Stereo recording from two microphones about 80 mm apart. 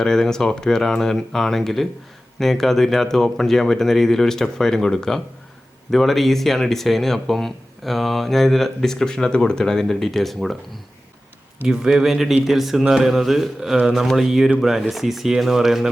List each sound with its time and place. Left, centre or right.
0.0 s speech: centre
11.7 s speech: centre